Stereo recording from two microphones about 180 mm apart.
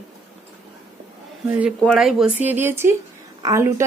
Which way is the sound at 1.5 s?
10° right (ahead or behind).